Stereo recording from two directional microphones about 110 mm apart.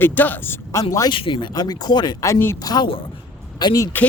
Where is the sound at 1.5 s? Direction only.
35° left (ahead or behind).